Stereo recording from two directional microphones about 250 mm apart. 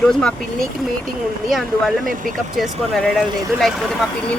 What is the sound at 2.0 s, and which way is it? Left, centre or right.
Speech, right.